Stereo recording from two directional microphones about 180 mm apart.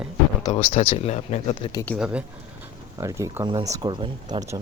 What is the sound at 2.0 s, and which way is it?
Speech, 5° right (ahead or behind).